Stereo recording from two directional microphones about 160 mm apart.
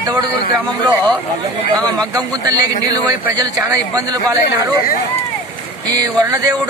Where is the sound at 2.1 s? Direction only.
25° right (ahead or behind).